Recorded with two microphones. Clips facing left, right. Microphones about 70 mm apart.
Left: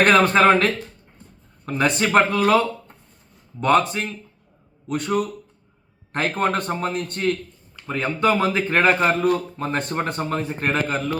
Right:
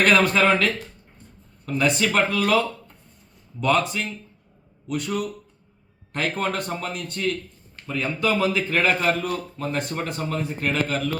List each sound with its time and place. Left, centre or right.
0.0 s a man's voice: left